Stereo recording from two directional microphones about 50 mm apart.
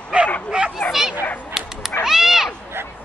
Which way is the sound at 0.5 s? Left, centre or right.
Right.